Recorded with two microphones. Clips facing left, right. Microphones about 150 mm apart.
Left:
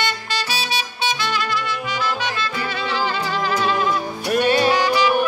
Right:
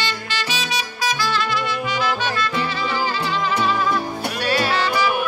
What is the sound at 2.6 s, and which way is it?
Music, 60° left (ahead or behind).